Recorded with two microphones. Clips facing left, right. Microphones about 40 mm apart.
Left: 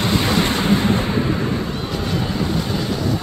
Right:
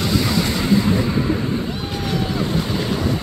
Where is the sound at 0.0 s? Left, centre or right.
Left.